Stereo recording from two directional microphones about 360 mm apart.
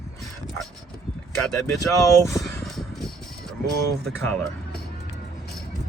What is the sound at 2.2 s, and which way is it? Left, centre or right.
Music, centre.